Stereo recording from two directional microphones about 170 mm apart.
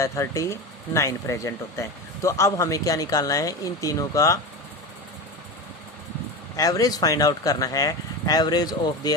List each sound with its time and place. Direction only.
0.0 s speech: 15° left (ahead or behind)
6.6 s speech: 20° left (ahead or behind)